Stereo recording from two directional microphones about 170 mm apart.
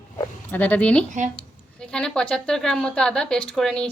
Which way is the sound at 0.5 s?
10° left (ahead or behind).